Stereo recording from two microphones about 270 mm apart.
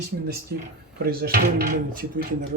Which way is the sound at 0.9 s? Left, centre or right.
Right.